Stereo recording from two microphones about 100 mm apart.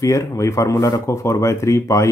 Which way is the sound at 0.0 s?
35° left (ahead or behind).